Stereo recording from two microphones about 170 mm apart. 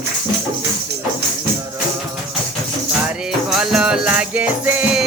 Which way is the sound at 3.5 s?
5° right (ahead or behind).